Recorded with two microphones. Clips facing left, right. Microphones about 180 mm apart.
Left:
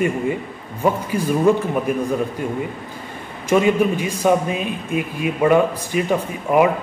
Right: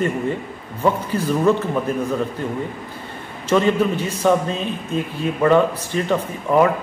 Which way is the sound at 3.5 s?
10° left (ahead or behind).